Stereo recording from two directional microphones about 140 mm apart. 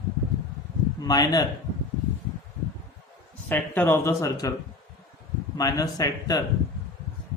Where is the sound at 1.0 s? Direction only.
30° left (ahead or behind).